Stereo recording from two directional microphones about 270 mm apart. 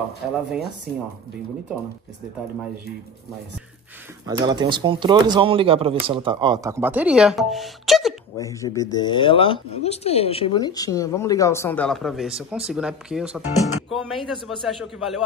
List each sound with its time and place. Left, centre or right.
4.3 s speech: centre
8.4 s speech: centre